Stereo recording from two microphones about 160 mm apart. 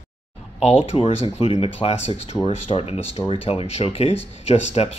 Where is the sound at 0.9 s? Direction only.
45° left (ahead or behind).